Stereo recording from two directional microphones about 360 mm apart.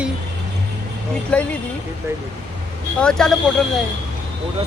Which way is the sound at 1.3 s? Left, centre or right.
Centre.